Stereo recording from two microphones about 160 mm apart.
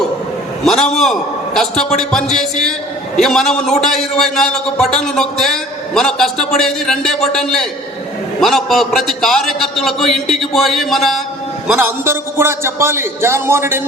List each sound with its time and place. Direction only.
0.6 s a man's voice: centre (ahead or behind)
11.7 s a man's voice: 15° right (ahead or behind)